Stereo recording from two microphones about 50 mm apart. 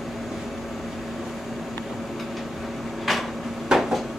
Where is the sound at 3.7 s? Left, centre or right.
Centre.